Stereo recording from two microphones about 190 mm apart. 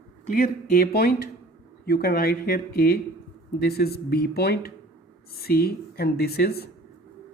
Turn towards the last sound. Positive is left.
turn(degrees=55)  # may be behind; listen again after turning